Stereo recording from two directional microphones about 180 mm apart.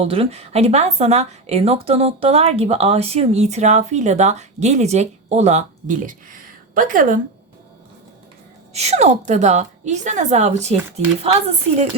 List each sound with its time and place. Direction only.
0.0 s a woman's voice: 35° right (ahead or behind)
8.7 s a woman's voice: 35° right (ahead or behind)